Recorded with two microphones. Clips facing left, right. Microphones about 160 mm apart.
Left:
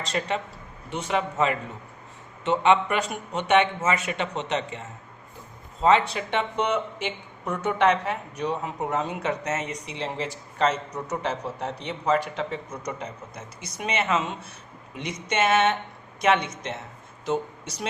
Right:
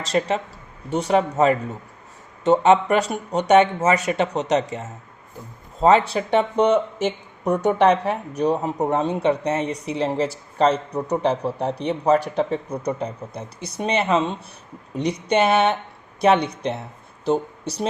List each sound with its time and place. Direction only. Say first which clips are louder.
0.0 s speech: right 6 dB; 35° right (ahead or behind)